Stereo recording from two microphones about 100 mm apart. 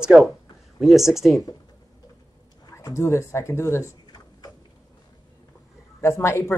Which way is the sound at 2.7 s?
30° left (ahead or behind).